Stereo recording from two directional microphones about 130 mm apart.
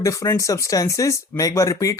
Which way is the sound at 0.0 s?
25° left (ahead or behind).